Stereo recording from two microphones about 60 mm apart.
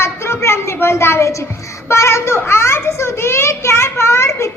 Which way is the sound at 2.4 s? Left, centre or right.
Left.